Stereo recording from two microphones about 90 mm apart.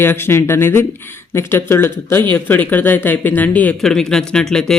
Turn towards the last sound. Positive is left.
turn(degrees=5)  # may be behind; listen again after turning